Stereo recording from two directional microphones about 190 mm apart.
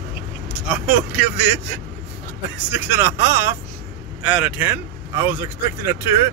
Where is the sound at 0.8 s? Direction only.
10° right (ahead or behind).